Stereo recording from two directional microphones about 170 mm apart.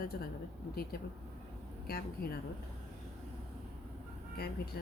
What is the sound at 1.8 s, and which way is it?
Speech, 65° left (ahead or behind).